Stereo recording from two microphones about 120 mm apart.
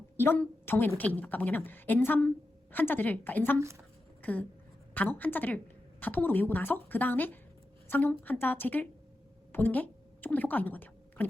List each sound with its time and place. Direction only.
0.2 s a woman's voice: 20° left (ahead or behind)